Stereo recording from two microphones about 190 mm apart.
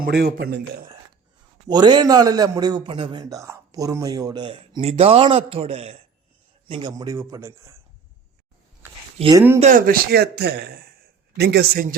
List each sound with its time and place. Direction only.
0.0 s speech: 60° right (ahead or behind)
1.6 s a man's voice: 20° right (ahead or behind)
9.1 s speech: 25° right (ahead or behind)
9.6 s speech: 40° right (ahead or behind)